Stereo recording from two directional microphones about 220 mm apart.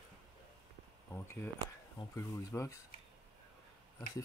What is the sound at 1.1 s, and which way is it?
Speech, 10° left (ahead or behind).